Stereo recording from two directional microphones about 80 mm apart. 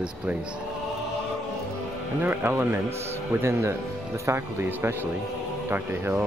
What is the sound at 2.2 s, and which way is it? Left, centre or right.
Speech, right.